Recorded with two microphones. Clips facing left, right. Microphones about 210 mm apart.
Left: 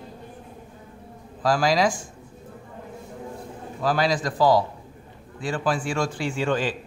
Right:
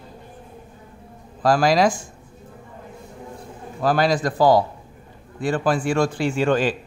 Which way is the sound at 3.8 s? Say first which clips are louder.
Right 4 dB; 55° right (ahead or behind).